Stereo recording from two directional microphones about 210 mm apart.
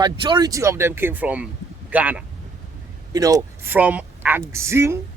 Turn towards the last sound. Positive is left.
turn(degrees=-10)  # may be behind; listen again after turning